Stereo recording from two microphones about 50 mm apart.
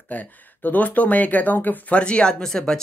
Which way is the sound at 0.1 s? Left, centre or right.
Left.